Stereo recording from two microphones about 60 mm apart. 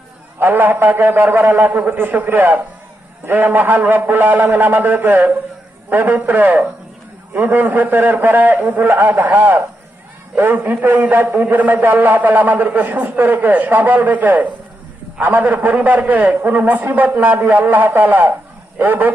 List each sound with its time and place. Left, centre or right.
0.3 s a man's voice: right